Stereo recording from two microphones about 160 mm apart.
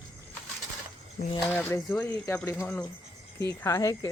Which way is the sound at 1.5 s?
15° left (ahead or behind).